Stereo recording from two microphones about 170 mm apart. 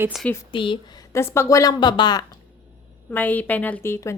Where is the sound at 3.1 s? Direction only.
10° left (ahead or behind).